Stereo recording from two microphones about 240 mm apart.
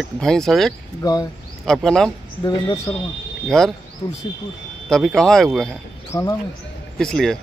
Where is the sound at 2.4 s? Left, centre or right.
Centre.